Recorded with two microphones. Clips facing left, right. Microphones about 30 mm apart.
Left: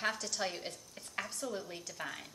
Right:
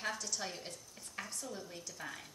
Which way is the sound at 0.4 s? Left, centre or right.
Left.